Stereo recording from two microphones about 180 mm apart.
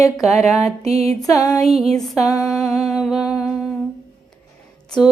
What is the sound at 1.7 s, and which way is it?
Music, centre (ahead or behind).